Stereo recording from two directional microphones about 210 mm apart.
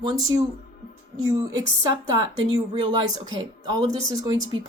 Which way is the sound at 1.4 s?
15° right (ahead or behind).